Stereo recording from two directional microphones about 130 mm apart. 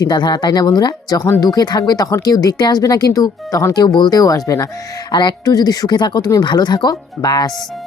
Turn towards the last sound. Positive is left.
turn(degrees=30)  # may be behind; listen again after turning